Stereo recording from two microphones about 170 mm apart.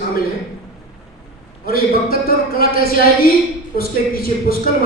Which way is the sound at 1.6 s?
60° left (ahead or behind).